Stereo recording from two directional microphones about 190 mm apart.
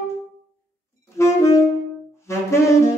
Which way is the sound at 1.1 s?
15° left (ahead or behind).